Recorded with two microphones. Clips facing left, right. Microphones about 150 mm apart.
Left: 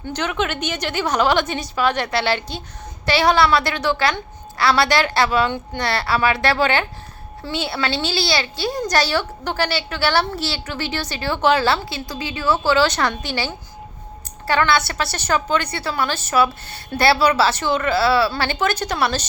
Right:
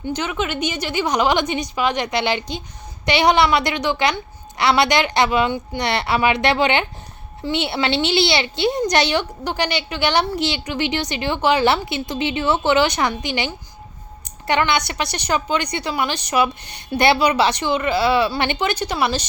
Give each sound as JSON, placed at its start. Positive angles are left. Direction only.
{"t": 0.1, "sound": "a woman's voice", "side_deg": -10}